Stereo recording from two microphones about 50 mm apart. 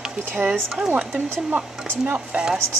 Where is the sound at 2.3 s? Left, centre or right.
Centre.